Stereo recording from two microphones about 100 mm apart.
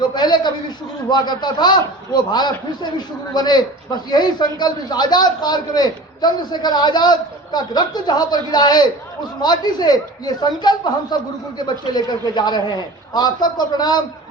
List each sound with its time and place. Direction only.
0.0 s a man's voice: 45° left (ahead or behind)